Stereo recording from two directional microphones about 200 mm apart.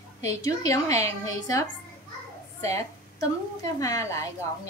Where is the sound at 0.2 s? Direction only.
15° left (ahead or behind).